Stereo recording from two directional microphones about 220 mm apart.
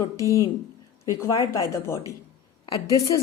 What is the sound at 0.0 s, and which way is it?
A woman's voice, 15° left (ahead or behind).